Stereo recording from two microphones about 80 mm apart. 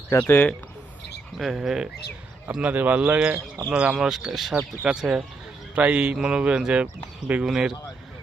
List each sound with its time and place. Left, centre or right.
0.1 s speech: left
1.4 s a man's voice: centre